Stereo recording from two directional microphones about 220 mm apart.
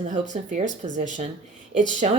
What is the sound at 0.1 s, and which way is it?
Speech, 35° right (ahead or behind).